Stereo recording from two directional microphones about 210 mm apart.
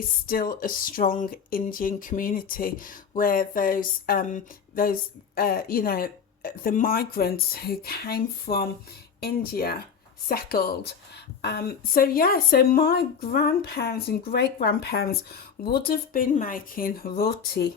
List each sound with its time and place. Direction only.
0.3 s speech: 45° left (ahead or behind)